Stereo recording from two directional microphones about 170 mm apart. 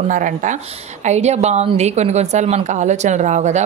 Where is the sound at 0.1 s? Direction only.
50° right (ahead or behind).